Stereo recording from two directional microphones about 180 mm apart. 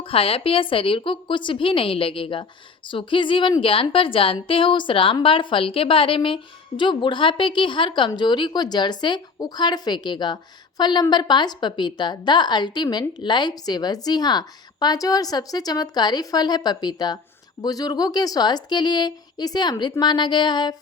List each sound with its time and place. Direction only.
0.0 s a woman's voice: 30° left (ahead or behind)